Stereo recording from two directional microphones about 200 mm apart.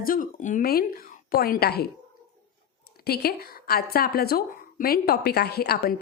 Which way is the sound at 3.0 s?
50° left (ahead or behind).